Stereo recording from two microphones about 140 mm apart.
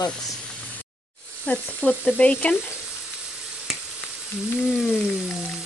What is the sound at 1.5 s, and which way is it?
A woman's voice, 10° left (ahead or behind).